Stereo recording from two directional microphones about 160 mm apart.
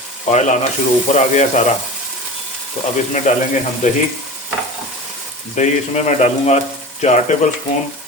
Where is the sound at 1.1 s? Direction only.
45° left (ahead or behind).